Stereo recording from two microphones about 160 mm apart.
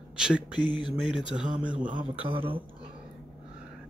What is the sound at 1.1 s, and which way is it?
Speech, 5° right (ahead or behind).